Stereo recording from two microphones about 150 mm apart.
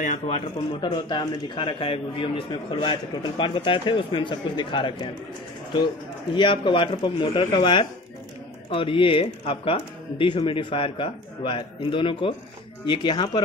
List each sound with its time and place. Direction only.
0.0 s speech: 60° left (ahead or behind)
0.7 s a man's voice: 30° left (ahead or behind)
6.3 s a man's voice: 30° left (ahead or behind)